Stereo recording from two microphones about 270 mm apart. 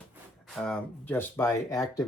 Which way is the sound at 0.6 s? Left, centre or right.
Centre.